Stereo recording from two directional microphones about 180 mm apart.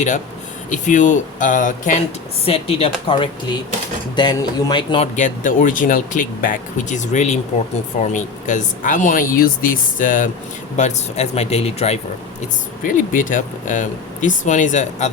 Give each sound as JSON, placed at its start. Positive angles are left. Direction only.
{"t": 0.7, "sound": "speech", "side_deg": 45}
{"t": 2.4, "sound": "speech", "side_deg": 35}
{"t": 5.1, "sound": "speech", "side_deg": 45}
{"t": 10.8, "sound": "speech", "side_deg": 40}
{"t": 12.8, "sound": "speech", "side_deg": 50}